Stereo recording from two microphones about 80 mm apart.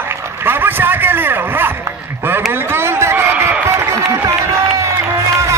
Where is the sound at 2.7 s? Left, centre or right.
Right.